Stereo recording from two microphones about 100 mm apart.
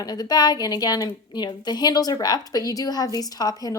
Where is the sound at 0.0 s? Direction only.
40° left (ahead or behind).